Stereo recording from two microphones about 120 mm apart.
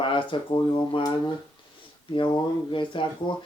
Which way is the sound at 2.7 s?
45° left (ahead or behind).